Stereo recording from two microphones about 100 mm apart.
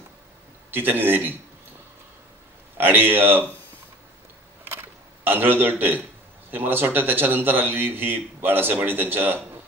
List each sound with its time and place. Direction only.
0.7 s a man's voice: 20° right (ahead or behind)
2.8 s a man's voice: 20° right (ahead or behind)
4.6 s a sound: 20° right (ahead or behind)
6.5 s a man's voice: 20° right (ahead or behind)